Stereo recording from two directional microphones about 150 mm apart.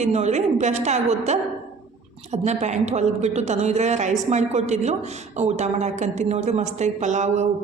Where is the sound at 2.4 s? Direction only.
50° right (ahead or behind).